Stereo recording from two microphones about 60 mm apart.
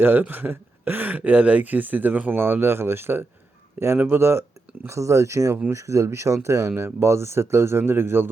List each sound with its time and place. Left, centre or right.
0.0 s speech: right
3.9 s speech: right
4.2 s speech: right